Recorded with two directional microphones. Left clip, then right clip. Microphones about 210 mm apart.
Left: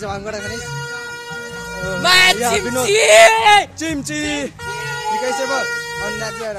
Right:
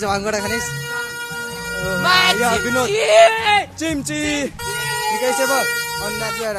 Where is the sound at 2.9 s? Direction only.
35° left (ahead or behind).